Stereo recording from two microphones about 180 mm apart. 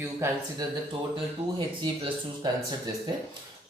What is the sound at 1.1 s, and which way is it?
Speech, 25° right (ahead or behind).